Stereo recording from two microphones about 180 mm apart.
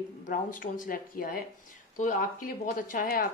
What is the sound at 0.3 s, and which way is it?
Speech, 45° left (ahead or behind).